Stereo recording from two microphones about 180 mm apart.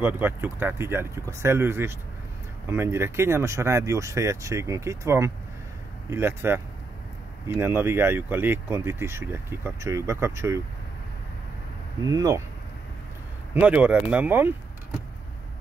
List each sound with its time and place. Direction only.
0.0 s speech: 10° right (ahead or behind)
12.1 s speech: 20° right (ahead or behind)
13.6 s speech: 5° right (ahead or behind)